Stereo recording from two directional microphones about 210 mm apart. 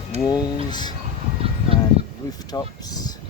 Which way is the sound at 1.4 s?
25° right (ahead or behind).